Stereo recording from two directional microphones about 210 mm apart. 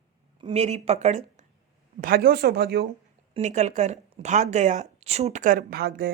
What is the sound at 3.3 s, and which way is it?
Speech, 35° right (ahead or behind).